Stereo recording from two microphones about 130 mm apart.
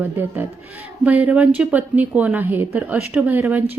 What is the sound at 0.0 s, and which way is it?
A woman's voice, 15° right (ahead or behind).